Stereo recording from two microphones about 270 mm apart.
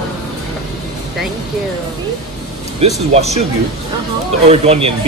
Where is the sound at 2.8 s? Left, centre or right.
Right.